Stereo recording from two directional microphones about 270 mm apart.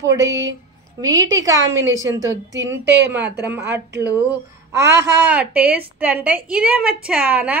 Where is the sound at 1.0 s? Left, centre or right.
Centre.